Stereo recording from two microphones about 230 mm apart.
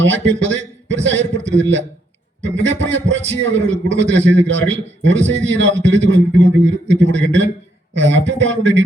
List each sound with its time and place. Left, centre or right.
0.0 s a man's voice: right